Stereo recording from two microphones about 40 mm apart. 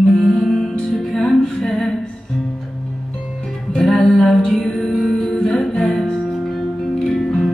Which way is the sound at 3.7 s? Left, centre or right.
Centre.